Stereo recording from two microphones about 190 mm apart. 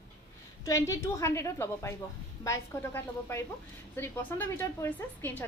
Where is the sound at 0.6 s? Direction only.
15° left (ahead or behind).